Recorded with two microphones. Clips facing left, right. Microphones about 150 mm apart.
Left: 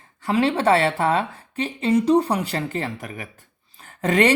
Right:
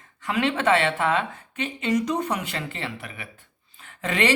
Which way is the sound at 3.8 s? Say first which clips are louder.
Left 6 dB; 40° left (ahead or behind).